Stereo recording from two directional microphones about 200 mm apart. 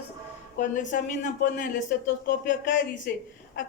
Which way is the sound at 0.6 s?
40° left (ahead or behind).